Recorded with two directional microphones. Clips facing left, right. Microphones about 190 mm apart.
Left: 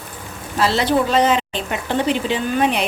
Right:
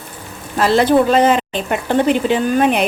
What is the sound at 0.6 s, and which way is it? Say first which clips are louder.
Speech: right 5 dB; 50° right (ahead or behind).